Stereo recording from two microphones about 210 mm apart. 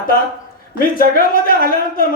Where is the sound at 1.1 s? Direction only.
45° left (ahead or behind).